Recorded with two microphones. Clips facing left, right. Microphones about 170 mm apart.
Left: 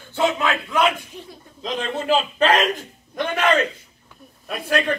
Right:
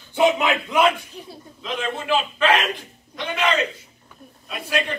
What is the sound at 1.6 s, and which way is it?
A man's voice, 35° left (ahead or behind).